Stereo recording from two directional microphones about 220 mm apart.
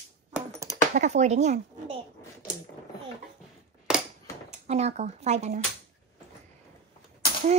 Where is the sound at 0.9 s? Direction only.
30° right (ahead or behind).